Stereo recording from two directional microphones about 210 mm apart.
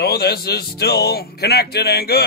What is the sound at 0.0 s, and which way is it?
Speech, 50° left (ahead or behind).